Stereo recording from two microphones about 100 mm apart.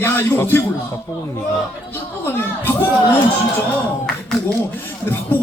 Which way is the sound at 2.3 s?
20° left (ahead or behind).